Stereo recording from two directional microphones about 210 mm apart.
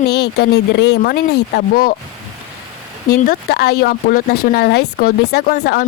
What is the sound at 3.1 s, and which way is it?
Speech, 45° left (ahead or behind).